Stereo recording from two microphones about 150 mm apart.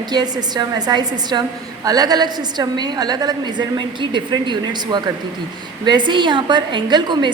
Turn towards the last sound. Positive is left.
turn(degrees=-30)  # may be behind; listen again after turning